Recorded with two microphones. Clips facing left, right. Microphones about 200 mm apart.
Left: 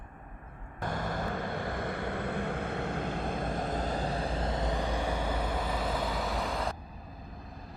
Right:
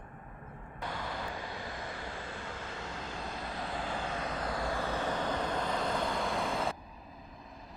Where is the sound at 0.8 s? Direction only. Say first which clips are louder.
Left 5 dB; 45° left (ahead or behind); by 6.8 s centre (ahead or behind).